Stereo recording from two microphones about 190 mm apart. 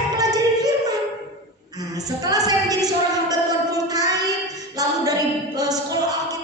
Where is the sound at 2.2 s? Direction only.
20° right (ahead or behind).